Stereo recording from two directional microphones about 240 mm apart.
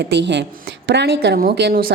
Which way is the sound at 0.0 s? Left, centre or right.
Right.